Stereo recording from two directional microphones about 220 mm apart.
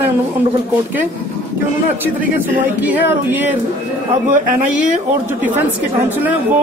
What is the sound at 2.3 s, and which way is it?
Speech, 10° right (ahead or behind).